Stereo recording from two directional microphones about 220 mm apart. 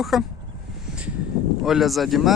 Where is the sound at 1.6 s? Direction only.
Centre (ahead or behind).